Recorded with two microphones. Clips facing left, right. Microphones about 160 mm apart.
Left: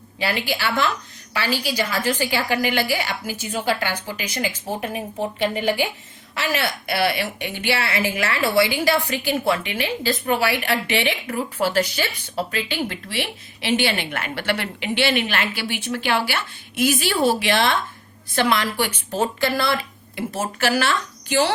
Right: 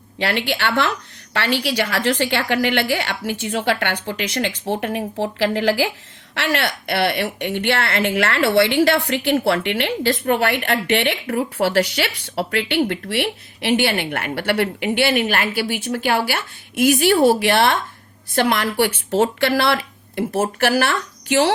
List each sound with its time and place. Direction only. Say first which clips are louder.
0.2 s a woman's voice: right 3 dB; 70° right (ahead or behind)
4.8 s a woman's voice: right 3 dB; 80° right
6.3 s a woman's voice: right 2 dB; 70° right (ahead or behind)